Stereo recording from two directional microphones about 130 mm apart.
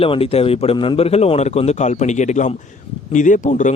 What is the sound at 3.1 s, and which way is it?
Speech, 75° left (ahead or behind).